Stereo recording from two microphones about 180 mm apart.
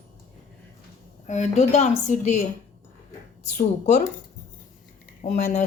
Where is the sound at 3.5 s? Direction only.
40° left (ahead or behind).